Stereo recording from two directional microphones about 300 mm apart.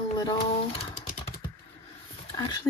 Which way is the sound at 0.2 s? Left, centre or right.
Centre.